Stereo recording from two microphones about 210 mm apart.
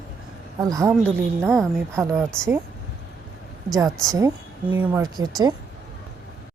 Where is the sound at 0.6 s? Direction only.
15° right (ahead or behind).